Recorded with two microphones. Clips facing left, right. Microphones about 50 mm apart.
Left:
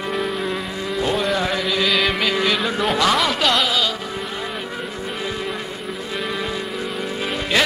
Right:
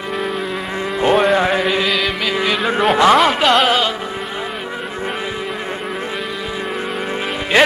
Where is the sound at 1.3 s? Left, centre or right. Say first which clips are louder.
Right 6 dB; right.